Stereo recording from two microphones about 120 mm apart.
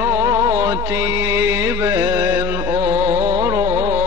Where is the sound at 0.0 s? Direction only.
20° right (ahead or behind).